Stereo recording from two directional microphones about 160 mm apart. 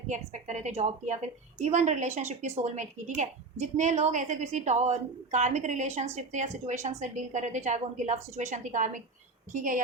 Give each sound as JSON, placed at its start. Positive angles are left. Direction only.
{"t": 0.1, "sound": "a woman's voice", "side_deg": -50}